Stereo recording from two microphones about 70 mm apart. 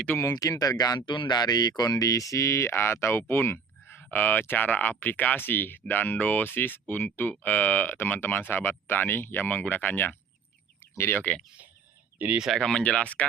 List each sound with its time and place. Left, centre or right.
0.2 s speech: left
10.9 s speech: left
12.5 s speech: centre